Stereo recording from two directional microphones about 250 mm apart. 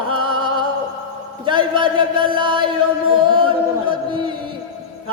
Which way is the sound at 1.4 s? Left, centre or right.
Centre.